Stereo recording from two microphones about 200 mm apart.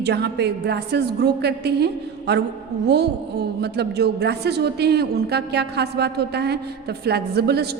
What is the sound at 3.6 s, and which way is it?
A woman's voice, 55° right (ahead or behind).